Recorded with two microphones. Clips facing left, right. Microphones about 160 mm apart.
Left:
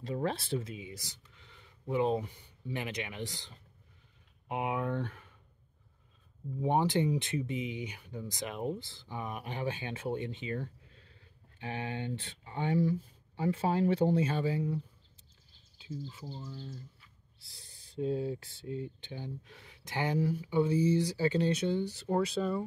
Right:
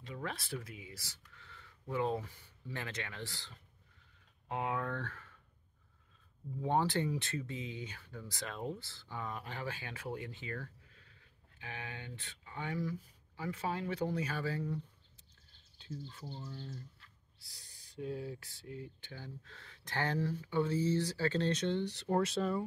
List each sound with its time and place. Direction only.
0.0 s speech: 35° left (ahead or behind); by 5.3 s 15° left (ahead or behind)
6.6 s speech: 15° left (ahead or behind)
16.1 s speech: 5° left (ahead or behind)
17.4 s speech: 25° left (ahead or behind); by 22.7 s centre (ahead or behind)